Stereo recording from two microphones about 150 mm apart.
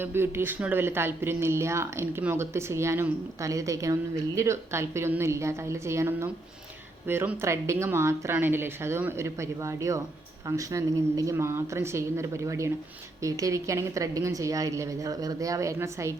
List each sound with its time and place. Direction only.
0.0 s a woman's voice: 15° right (ahead or behind)